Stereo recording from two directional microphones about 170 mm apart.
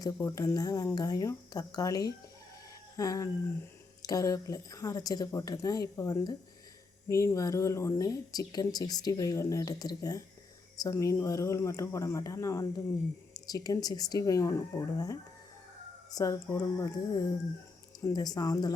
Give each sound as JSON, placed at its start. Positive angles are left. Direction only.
{"t": 0.0, "sound": "speech", "side_deg": 15}